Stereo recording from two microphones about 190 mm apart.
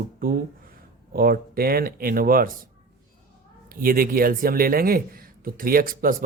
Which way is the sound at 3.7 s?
50° right (ahead or behind).